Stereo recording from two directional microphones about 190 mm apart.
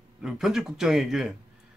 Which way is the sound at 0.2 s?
5° right (ahead or behind).